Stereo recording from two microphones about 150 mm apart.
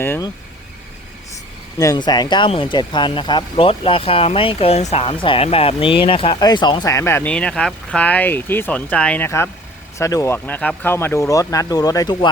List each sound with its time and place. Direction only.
1.8 s speech: 25° left (ahead or behind)